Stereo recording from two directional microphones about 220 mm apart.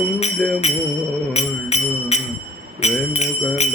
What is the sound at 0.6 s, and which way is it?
Music, 30° left (ahead or behind).